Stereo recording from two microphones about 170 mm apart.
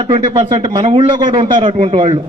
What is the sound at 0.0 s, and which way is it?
A man's voice, 30° right (ahead or behind).